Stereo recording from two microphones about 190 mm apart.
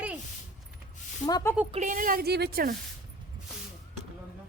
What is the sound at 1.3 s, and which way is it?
Speech, 20° left (ahead or behind).